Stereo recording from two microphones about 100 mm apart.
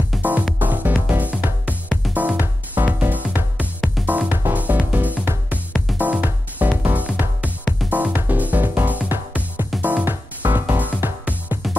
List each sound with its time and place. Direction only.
0.1 s music: centre (ahead or behind)
0.6 s music: 15° right (ahead or behind)